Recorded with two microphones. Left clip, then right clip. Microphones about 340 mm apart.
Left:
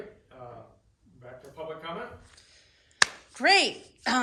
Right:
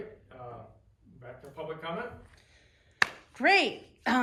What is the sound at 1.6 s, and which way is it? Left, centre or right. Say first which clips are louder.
Speech: even; centre.